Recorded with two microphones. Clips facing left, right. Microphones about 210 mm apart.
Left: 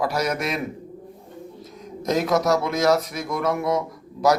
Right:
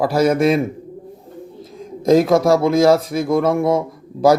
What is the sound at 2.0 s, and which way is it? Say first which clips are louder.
Speech: right 8 dB; 30° right (ahead or behind).